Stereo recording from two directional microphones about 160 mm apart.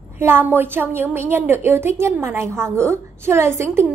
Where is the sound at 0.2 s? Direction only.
15° right (ahead or behind).